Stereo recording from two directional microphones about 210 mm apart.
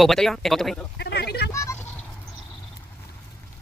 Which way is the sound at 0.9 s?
50° left (ahead or behind).